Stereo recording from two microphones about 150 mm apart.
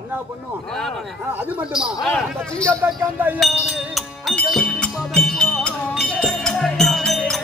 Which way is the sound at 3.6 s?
Centre (ahead or behind).